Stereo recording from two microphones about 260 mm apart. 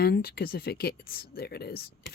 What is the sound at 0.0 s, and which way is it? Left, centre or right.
Speech, left.